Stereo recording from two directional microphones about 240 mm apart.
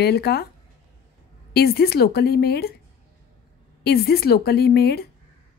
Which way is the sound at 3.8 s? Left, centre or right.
Left.